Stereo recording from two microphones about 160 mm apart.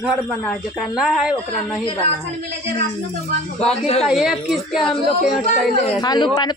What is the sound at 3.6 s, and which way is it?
Speech, 40° left (ahead or behind).